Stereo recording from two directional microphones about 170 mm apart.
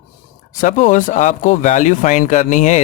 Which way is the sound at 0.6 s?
50° left (ahead or behind).